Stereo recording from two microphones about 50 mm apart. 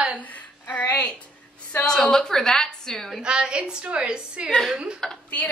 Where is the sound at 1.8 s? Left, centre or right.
Centre.